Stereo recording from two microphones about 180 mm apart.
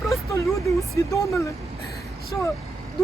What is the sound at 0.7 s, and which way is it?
Speech, 15° left (ahead or behind).